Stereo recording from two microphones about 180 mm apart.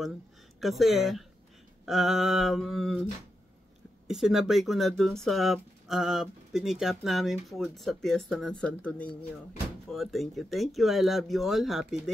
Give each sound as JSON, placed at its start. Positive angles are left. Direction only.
{"t": 0.6, "sound": "speech", "side_deg": 0}
{"t": 4.1, "sound": "speech", "side_deg": 0}